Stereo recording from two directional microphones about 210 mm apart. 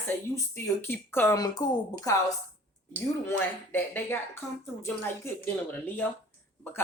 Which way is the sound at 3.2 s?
10° left (ahead or behind).